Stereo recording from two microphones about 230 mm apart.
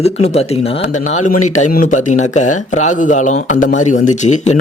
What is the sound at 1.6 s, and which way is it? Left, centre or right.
Speech, left.